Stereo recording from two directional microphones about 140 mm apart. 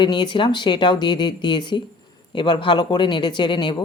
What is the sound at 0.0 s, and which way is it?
Speech, 35° left (ahead or behind).